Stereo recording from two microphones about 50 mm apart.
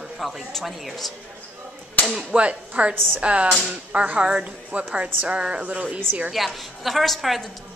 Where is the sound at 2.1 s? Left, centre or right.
Right.